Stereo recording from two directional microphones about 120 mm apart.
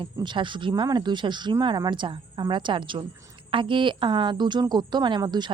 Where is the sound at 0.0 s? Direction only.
40° right (ahead or behind).